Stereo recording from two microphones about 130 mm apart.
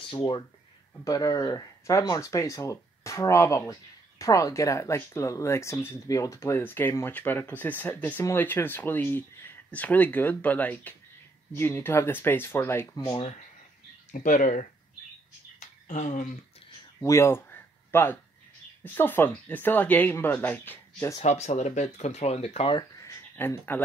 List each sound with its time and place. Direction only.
1.0 s speech: 30° left (ahead or behind)
14.1 s speech: 80° left
15.9 s speech: 70° left (ahead or behind)
17.0 s a sound: 20° left (ahead or behind)
18.9 s speech: 15° left (ahead or behind)
21.2 s speech: 55° left (ahead or behind)
22.8 s a sound: 25° left (ahead or behind)